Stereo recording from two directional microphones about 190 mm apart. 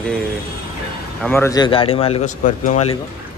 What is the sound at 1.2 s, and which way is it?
Speech, 10° left (ahead or behind).